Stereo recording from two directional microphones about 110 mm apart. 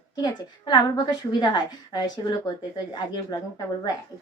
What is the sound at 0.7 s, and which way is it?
Speech, 45° left (ahead or behind).